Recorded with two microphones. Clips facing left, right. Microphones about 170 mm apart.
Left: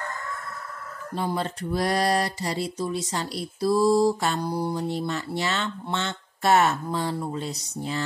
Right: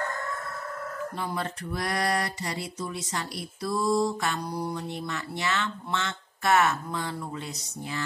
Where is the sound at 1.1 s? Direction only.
30° left (ahead or behind).